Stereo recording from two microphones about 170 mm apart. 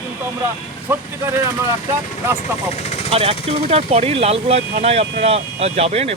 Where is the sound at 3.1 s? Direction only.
35° right (ahead or behind).